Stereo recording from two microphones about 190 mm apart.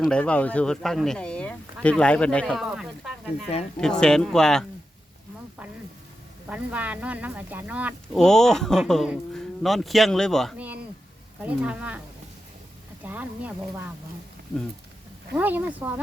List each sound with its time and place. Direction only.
0.0 s speech: 5° left (ahead or behind)
6.5 s speech: 5° right (ahead or behind)
8.1 s speech: centre (ahead or behind)
13.0 s speech: 10° right (ahead or behind)
15.4 s speech: 10° right (ahead or behind)